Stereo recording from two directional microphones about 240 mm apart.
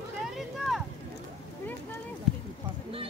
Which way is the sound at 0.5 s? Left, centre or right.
Centre.